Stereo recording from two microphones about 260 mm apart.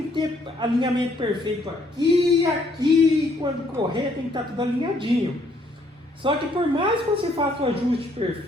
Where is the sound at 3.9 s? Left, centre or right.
Centre.